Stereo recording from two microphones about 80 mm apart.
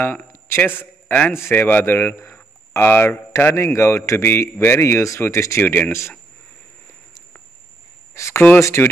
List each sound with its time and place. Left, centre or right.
0.0 s a man's voice: left
0.7 s a sound: left
1.3 s a man's voice: left
5.6 s speech: left
5.9 s a man's voice: left
8.1 s a man's voice: left